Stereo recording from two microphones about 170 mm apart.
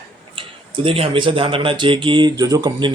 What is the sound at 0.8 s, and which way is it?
Speech, 35° right (ahead or behind).